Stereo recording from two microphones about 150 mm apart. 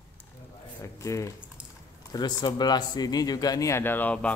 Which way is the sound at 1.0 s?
20° left (ahead or behind).